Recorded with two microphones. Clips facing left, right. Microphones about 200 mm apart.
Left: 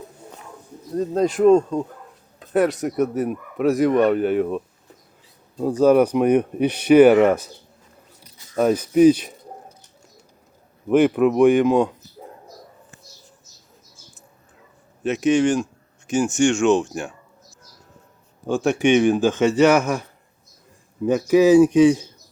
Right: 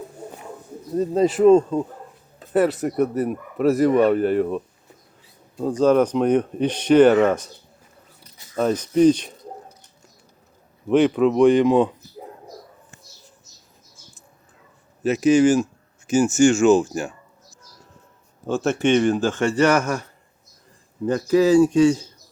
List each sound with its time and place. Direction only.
0.9 s speech: 5° right (ahead or behind)
8.5 s speech: 10° left (ahead or behind)
10.8 s speech: 5° left (ahead or behind)
15.0 s speech: centre (ahead or behind)
18.6 s speech: 15° left (ahead or behind)
21.0 s speech: 15° left (ahead or behind)